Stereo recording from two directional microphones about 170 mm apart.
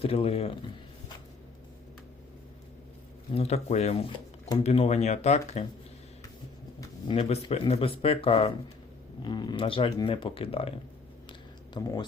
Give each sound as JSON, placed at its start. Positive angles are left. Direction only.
{"t": 0.0, "sound": "speech", "side_deg": 35}
{"t": 3.3, "sound": "speech", "side_deg": 40}
{"t": 6.7, "sound": "speech", "side_deg": 30}
{"t": 11.3, "sound": "a sound", "side_deg": 25}